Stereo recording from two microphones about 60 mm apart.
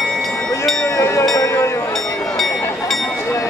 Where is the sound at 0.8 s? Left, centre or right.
Left.